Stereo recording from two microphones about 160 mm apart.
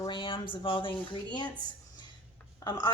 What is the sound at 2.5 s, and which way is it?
Speech, 25° left (ahead or behind).